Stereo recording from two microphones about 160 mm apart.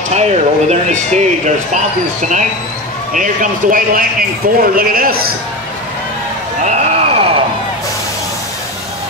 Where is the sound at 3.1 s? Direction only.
55° right (ahead or behind).